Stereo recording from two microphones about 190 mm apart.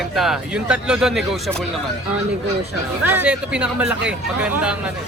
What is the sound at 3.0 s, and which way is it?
Speech, 10° right (ahead or behind).